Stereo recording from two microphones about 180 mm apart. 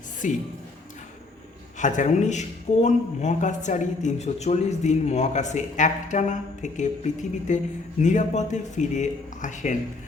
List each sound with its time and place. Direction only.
0.2 s speech: 45° left (ahead or behind)
1.8 s speech: 45° left (ahead or behind)